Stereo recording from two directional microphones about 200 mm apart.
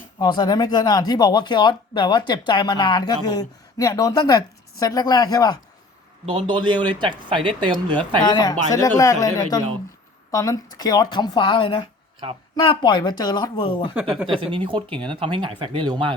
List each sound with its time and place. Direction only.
0.2 s speech: 20° left (ahead or behind)
6.2 s speech: 25° right (ahead or behind)
8.2 s speech: 20° left (ahead or behind)
12.2 s speech: 30° right (ahead or behind)
12.5 s speech: 20° left (ahead or behind)
13.9 s speech: 5° right (ahead or behind)
14.5 s speech: 25° right (ahead or behind)